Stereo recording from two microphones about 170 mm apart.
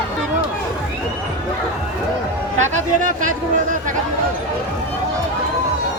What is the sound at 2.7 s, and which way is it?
Speech, 50° right (ahead or behind).